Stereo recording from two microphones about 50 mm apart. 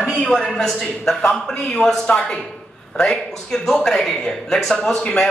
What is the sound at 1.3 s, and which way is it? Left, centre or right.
Speech, centre.